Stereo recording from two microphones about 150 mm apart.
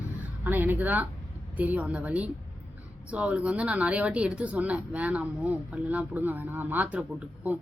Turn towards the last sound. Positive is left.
turn(degrees=-10)  # may be behind; listen again after turning